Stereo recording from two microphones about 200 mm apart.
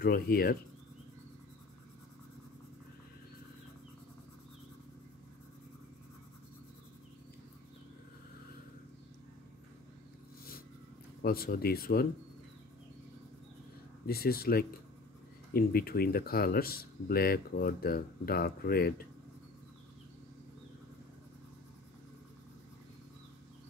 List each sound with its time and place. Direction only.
0.0 s speech: 50° left (ahead or behind)
11.2 s speech: 50° left (ahead or behind)
14.0 s speech: 50° left (ahead or behind)